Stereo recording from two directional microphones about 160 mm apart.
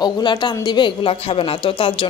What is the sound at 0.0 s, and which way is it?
A woman's voice, 30° left (ahead or behind).